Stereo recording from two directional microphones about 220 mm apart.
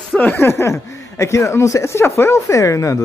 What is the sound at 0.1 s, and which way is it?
Speech, 10° left (ahead or behind).